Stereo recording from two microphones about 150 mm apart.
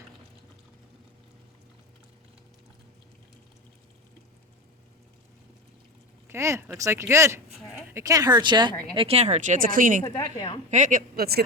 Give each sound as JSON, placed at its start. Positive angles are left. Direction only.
{"t": 6.2, "sound": "a sound", "side_deg": -20}
{"t": 6.7, "sound": "speech", "side_deg": -20}
{"t": 9.0, "sound": "speech", "side_deg": -40}
{"t": 10.0, "sound": "a woman's voice", "side_deg": 25}
{"t": 10.7, "sound": "speech", "side_deg": -55}